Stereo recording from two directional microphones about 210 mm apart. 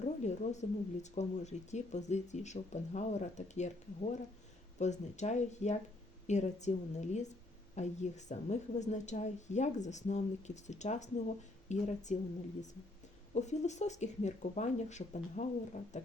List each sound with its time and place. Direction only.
0.0 s speech: 35° left (ahead or behind)
13.3 s speech: 35° left (ahead or behind)